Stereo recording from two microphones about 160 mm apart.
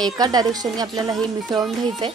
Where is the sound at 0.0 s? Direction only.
25° right (ahead or behind).